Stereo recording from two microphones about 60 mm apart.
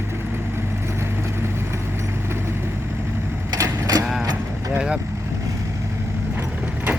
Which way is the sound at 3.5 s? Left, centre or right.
Right.